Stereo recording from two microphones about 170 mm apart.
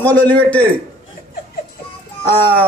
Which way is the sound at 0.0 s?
10° left (ahead or behind).